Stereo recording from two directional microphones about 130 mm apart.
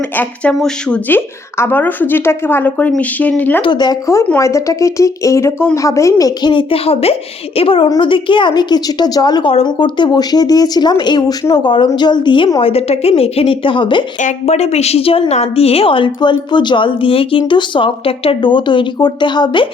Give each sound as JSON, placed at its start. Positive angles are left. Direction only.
{"t": 0.2, "sound": "speech", "side_deg": 10}
{"t": 3.6, "sound": "a woman's voice", "side_deg": 35}
{"t": 9.5, "sound": "a woman's voice", "side_deg": 45}
{"t": 12.5, "sound": "a woman's voice", "side_deg": 50}
{"t": 14.2, "sound": "a woman's voice", "side_deg": 65}